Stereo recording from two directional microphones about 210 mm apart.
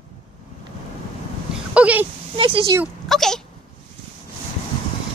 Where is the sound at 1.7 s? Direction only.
5° right (ahead or behind).